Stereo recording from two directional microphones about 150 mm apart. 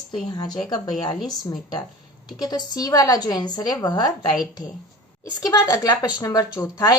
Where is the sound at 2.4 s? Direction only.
25° left (ahead or behind).